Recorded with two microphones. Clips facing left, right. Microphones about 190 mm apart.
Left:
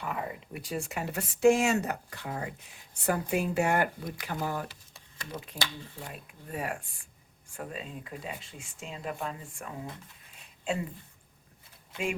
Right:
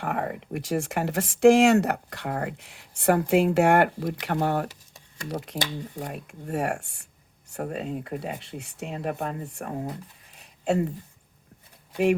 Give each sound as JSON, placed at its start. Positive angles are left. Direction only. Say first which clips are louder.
{"t": 0.0, "sound": "speech", "louder": "right 6 dB", "side_deg": -70}
{"t": 5.5, "sound": "speech", "louder": "right 7 dB", "side_deg": -20}
{"t": 6.1, "sound": "speech", "louder": "right 8 dB", "side_deg": -45}
{"t": 6.5, "sound": "speech", "louder": "right 8 dB", "side_deg": -75}
{"t": 7.5, "sound": "speech", "louder": "right 9 dB", "side_deg": -60}
{"t": 9.7, "sound": "speech", "louder": "right 9 dB", "side_deg": -40}